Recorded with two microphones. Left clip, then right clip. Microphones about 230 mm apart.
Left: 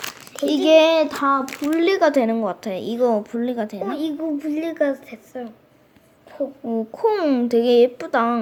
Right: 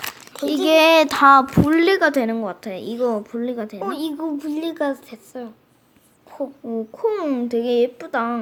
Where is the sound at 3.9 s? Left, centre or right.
Right.